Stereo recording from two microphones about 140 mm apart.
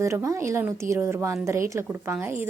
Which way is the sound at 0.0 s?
20° right (ahead or behind).